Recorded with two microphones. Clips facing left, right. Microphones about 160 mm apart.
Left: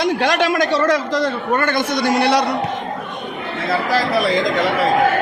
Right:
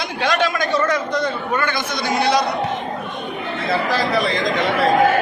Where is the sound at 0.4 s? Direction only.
75° left (ahead or behind).